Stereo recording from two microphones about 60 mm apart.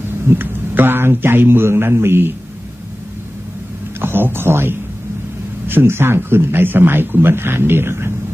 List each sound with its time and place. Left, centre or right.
0.3 s a man's voice: right
4.0 s a sound: right
5.7 s speech: right